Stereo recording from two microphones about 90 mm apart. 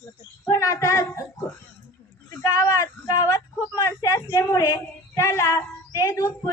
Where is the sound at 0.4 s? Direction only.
40° left (ahead or behind).